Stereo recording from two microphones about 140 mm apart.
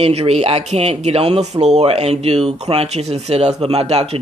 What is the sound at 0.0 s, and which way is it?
Speech, 45° right (ahead or behind).